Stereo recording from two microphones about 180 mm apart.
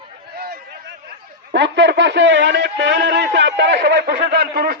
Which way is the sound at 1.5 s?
75° right (ahead or behind).